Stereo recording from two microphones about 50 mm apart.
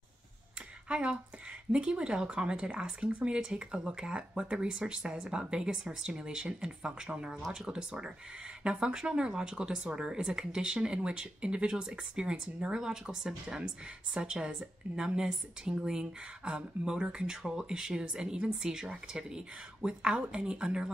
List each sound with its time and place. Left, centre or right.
0.8 s speech: right